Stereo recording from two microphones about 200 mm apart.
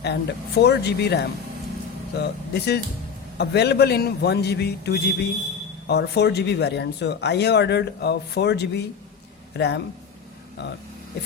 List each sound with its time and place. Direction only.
0.0 s speech: 55° left (ahead or behind)